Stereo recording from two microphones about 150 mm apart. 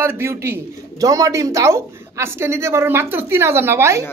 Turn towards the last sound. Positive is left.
turn(degrees=-15)  # may be behind; listen again after turning